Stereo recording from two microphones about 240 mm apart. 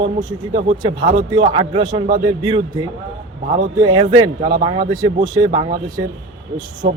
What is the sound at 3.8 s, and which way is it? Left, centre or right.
Speech, centre.